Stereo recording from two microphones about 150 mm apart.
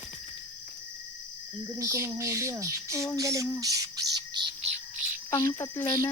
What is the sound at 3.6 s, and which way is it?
Squawk, 25° right (ahead or behind).